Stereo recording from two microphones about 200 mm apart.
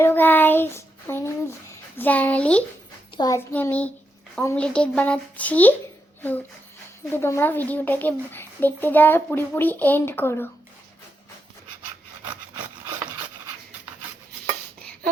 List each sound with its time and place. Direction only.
0.0 s child singing: 10° left (ahead or behind)
2.0 s a child's voice: 10° left (ahead or behind)
3.2 s a child's voice: 20° left (ahead or behind)
3.5 s a child's voice: 10° left (ahead or behind)
7.1 s a child's voice: 10° left (ahead or behind)
14.8 s a sound: 5° left (ahead or behind)